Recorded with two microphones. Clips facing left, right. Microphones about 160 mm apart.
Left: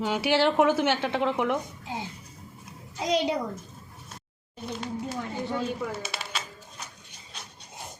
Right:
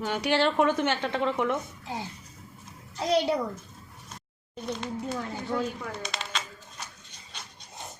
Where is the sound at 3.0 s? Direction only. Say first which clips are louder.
Right 1 dB; 15° left (ahead or behind).